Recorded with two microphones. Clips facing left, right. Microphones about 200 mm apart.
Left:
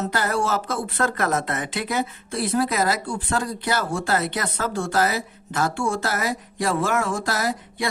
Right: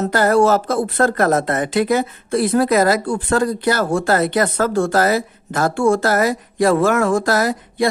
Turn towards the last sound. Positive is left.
turn(degrees=-40)  # may be behind; listen again after turning